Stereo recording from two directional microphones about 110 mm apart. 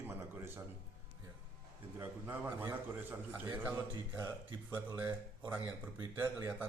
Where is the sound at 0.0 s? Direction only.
20° right (ahead or behind).